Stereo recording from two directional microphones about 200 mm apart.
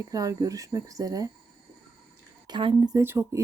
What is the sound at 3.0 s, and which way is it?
Speech, 15° right (ahead or behind).